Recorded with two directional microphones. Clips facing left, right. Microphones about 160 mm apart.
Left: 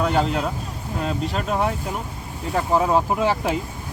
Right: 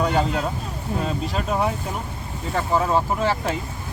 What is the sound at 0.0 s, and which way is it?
Speech, centre (ahead or behind).